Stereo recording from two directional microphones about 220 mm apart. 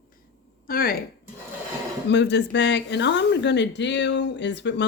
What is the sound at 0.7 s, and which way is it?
Speech, 40° left (ahead or behind).